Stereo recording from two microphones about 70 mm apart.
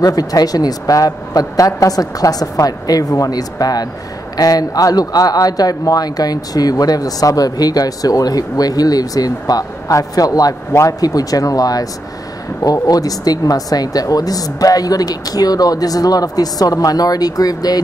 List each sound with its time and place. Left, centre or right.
0.0 s speech: left